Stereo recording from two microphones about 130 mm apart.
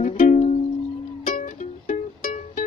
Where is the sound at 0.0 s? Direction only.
70° left (ahead or behind).